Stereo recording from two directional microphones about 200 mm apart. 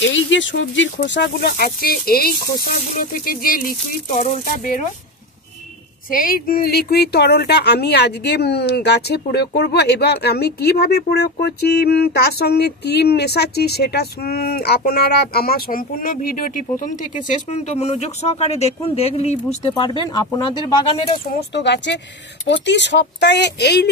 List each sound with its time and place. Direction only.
0.0 s speech: 65° left (ahead or behind); by 4.7 s 40° left (ahead or behind)
6.0 s speech: 45° left (ahead or behind); by 21.2 s 30° left (ahead or behind)
21.5 s speech: 60° left (ahead or behind)